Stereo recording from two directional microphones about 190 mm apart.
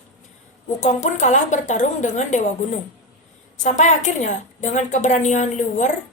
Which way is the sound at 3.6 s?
40° left (ahead or behind).